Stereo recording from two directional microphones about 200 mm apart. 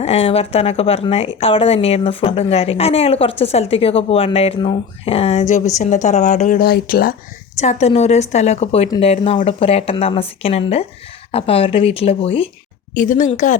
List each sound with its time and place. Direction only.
0.0 s a woman's voice: 30° left (ahead or behind); by 7.2 s 50° left (ahead or behind)
7.6 s a woman's voice: 35° left (ahead or behind)
12.9 s speech: 40° left (ahead or behind)